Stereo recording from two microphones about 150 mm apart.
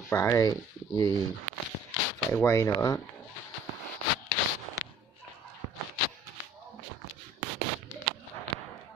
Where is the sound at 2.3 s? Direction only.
15° left (ahead or behind).